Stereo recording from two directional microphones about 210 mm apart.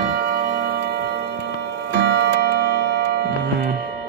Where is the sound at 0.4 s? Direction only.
45° right (ahead or behind).